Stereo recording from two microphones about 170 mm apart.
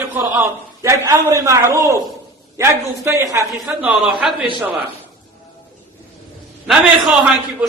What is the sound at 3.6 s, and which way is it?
Speech, 5° right (ahead or behind).